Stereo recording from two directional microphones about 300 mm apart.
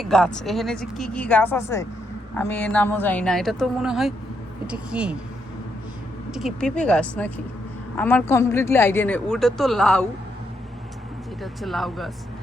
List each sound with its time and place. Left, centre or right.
0.0 s a woman's voice: centre
6.3 s a woman's voice: centre
11.6 s a woman's voice: centre